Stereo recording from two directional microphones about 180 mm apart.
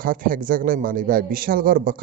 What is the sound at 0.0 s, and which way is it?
A man's voice, 50° right (ahead or behind).